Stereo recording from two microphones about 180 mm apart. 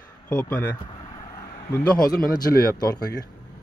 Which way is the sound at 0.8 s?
25° left (ahead or behind).